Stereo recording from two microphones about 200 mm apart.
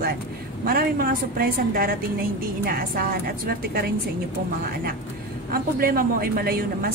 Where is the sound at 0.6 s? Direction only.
45° right (ahead or behind).